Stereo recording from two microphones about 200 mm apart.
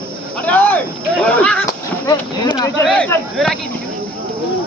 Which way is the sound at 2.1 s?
20° left (ahead or behind).